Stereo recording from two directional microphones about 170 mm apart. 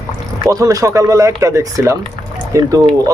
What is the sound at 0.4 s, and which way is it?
Speech, 20° right (ahead or behind).